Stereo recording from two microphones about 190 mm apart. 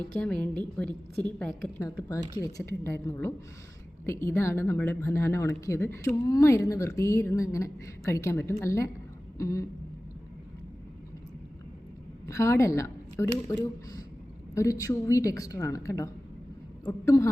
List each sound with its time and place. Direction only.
0.2 s a woman's voice: 5° left (ahead or behind)
1.8 s speech: 15° left (ahead or behind)
12.2 s a woman's voice: 15° left (ahead or behind)
14.5 s speech: 15° left (ahead or behind)